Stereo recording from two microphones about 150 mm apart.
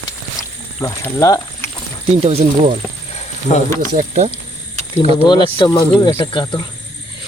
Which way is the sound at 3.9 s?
55° right (ahead or behind).